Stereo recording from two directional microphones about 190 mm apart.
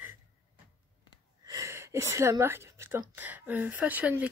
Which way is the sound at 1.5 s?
15° right (ahead or behind).